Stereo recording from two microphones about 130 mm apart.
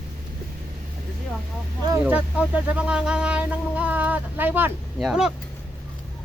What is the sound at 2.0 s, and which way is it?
Speech, 10° right (ahead or behind).